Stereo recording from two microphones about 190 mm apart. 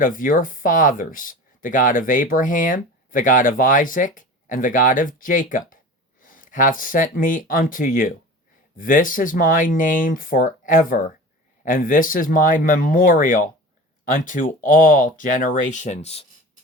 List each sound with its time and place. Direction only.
0.0 s speech: 45° left (ahead or behind)